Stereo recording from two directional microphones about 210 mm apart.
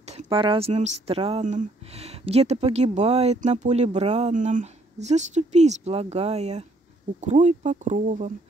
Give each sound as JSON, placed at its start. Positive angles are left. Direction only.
{"t": 0.0, "sound": "speech", "side_deg": -30}